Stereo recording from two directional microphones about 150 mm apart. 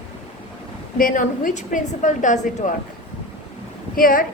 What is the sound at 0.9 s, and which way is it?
A woman's voice, 65° left (ahead or behind).